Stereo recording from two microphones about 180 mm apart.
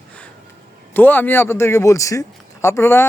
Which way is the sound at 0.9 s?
10° left (ahead or behind).